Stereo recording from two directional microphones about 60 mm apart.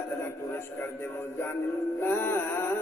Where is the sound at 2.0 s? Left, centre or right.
Left.